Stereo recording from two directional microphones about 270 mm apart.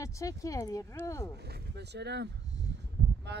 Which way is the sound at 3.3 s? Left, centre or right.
Right.